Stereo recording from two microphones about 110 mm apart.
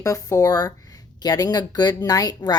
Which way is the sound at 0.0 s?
30° left (ahead or behind).